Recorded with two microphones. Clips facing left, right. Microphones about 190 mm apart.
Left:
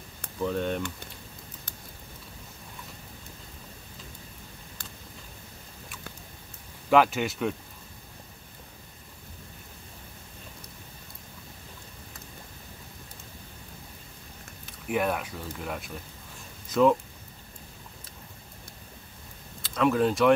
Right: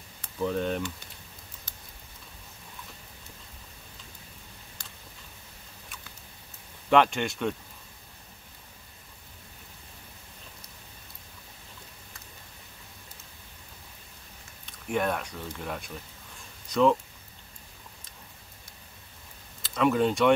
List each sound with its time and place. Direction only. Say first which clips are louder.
0.4 s speech: even; centre (ahead or behind)
6.9 s speech: left 1 dB; 5° left (ahead or behind)
14.7 s speech: left 1 dB; 5° left (ahead or behind)
19.6 s speech: even; centre (ahead or behind)